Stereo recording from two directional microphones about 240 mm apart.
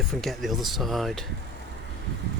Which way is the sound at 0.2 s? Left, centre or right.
Centre.